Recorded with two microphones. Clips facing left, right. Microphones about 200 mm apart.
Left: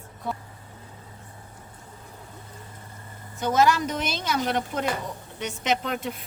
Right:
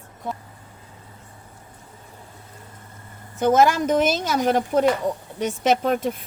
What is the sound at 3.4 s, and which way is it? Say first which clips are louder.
A woman's voice: right 4 dB; 50° right (ahead or behind).